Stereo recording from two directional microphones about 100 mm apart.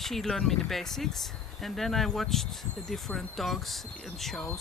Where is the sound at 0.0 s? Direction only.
5° left (ahead or behind).